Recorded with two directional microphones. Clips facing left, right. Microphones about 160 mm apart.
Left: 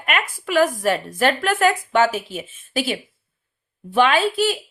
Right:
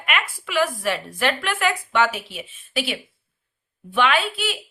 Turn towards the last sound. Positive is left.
turn(degrees=40)  # may be behind; listen again after turning